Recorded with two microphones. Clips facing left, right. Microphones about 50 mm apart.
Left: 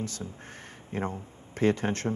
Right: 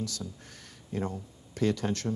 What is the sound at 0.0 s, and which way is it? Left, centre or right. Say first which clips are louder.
A woman's voice: left 1 dB; left.